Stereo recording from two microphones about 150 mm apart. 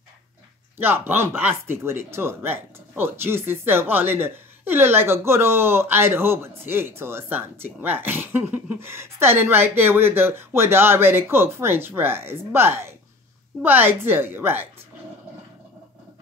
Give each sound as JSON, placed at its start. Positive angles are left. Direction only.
{"t": 0.7, "sound": "speech", "side_deg": -15}